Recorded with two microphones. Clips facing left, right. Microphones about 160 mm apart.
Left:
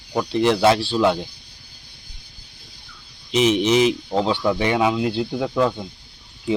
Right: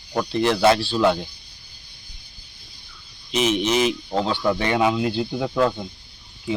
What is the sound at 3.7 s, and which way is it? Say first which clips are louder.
Speech: left 4 dB; 20° left (ahead or behind).